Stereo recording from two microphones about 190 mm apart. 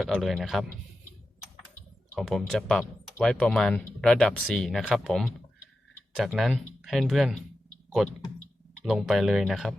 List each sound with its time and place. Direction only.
0.0 s speech: centre (ahead or behind)
2.1 s speech: centre (ahead or behind)
8.8 s speech: centre (ahead or behind)